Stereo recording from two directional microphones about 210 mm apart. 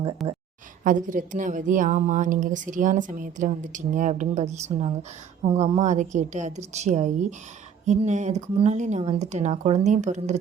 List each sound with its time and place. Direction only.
0.2 s speech: centre (ahead or behind)
0.9 s speech: 40° right (ahead or behind)